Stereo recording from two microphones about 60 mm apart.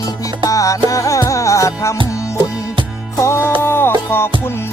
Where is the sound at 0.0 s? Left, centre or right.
Left.